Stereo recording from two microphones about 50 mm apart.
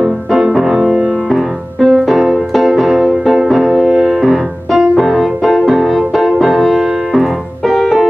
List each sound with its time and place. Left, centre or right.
0.3 s music: centre
0.8 s music: right
1.3 s music: centre
7.7 s piano: centre